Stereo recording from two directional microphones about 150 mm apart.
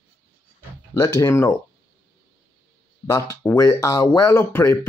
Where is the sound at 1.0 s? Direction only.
20° left (ahead or behind).